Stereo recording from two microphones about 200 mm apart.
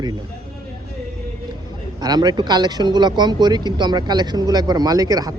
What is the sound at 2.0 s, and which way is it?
Speech, 20° right (ahead or behind).